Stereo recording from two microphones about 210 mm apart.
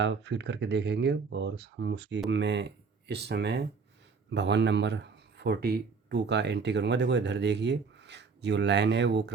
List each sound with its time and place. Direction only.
0.0 s speech: 55° right (ahead or behind)